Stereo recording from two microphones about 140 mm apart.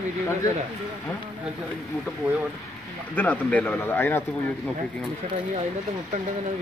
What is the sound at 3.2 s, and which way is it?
Speech, 10° left (ahead or behind).